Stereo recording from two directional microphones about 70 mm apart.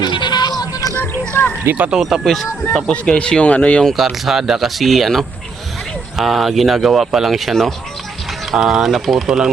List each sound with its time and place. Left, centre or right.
0.0 s bleat: left
0.6 s music: left
1.6 s speech: right
1.9 s speech: centre
2.9 s speech: centre
3.8 s speech: centre